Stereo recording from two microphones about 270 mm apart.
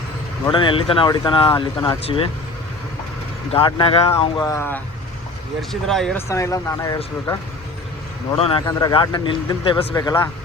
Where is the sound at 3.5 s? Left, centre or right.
Centre.